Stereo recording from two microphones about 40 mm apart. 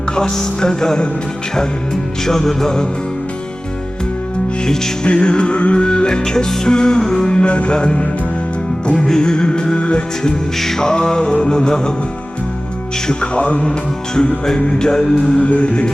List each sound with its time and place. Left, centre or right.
0.2 s music: centre
2.2 s music: centre
4.6 s music: centre
5.0 s music: left
7.3 s music: left
9.0 s music: centre
10.6 s music: centre
13.1 s music: left
14.2 s music: centre
15.4 s music: left